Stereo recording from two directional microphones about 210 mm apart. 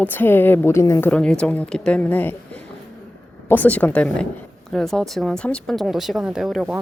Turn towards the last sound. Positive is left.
turn(degrees=-5)  # may be behind; listen again after turning